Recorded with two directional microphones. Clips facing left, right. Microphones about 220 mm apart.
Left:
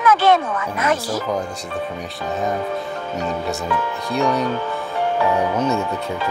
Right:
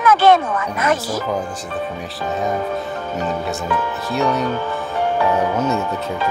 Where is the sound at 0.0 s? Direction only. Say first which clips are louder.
Right 2 dB; 50° right (ahead or behind).